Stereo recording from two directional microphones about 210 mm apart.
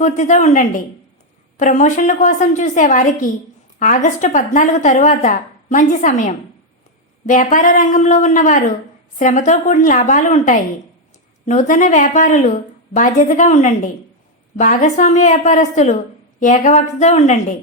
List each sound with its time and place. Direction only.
0.0 s a woman's voice: 35° left (ahead or behind)